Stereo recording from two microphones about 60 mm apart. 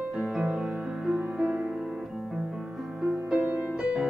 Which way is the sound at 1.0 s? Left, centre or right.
Centre.